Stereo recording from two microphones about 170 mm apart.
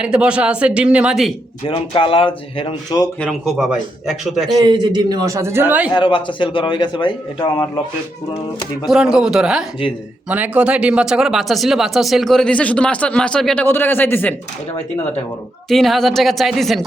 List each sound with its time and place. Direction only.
0.0 s a man's voice: 5° right (ahead or behind)
1.6 s speech: 30° left (ahead or behind)
3.2 s speech: centre (ahead or behind)
4.5 s a man's voice: 25° right (ahead or behind); by 5.9 s 10° right (ahead or behind)
5.9 s a man's voice: 30° left (ahead or behind)
8.9 s speech: 5° right (ahead or behind); by 14.3 s 10° left (ahead or behind)
15.7 s speech: centre (ahead or behind)